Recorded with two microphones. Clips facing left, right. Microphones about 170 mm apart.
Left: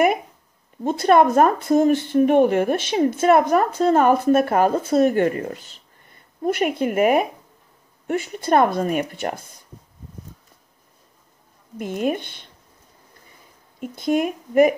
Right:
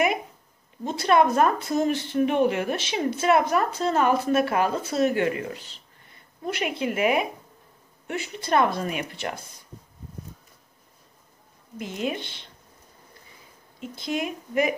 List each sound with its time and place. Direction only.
0.8 s a woman's voice: 50° left (ahead or behind)
11.8 s a woman's voice: 50° left (ahead or behind)
13.7 s a woman's voice: 50° left (ahead or behind)